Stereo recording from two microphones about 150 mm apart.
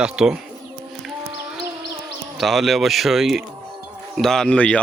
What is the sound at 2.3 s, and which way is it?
Speech, centre (ahead or behind).